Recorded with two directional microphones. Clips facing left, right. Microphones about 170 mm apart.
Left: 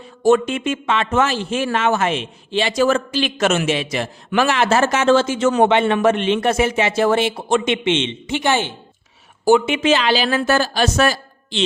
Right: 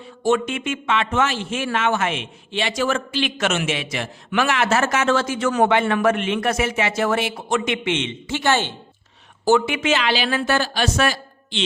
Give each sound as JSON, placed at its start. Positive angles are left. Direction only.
{"t": 0.2, "sound": "speech", "side_deg": 40}